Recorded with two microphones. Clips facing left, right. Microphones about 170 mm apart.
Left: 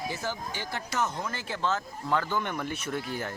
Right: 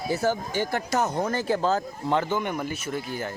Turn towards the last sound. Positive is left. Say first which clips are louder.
# right 2 dB
turn(degrees=0)  # may be behind; listen again after turning